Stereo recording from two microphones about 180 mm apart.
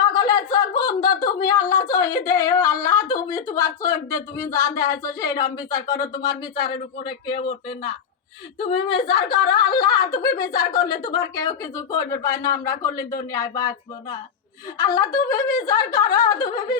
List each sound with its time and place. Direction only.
0.0 s a sound: 25° left (ahead or behind)
1.1 s speech: 20° left (ahead or behind)
8.5 s speech: 30° left (ahead or behind)
14.8 s speech: 20° left (ahead or behind)